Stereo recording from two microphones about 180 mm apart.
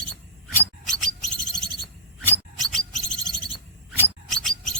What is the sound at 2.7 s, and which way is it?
Bird, centre (ahead or behind).